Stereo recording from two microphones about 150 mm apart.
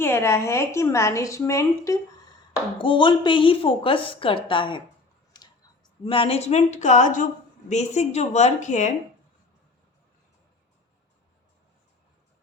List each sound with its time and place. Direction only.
0.0 s a woman's voice: 15° left (ahead or behind)
2.7 s a woman's voice: 35° left (ahead or behind)
5.3 s a sound: 30° left (ahead or behind)
6.1 s a woman's voice: 40° left (ahead or behind)